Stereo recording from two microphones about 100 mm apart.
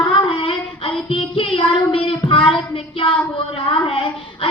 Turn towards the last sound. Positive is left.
turn(degrees=65)  # may be behind; listen again after turning